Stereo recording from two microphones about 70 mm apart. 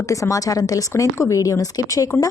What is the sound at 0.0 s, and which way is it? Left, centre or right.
A woman's voice, left.